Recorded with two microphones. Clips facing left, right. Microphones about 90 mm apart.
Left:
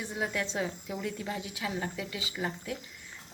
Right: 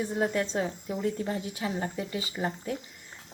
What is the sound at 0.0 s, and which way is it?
Speech, 40° right (ahead or behind).